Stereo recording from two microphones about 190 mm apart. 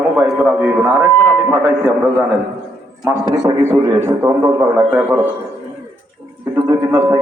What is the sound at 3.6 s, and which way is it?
A man's voice, 20° right (ahead or behind).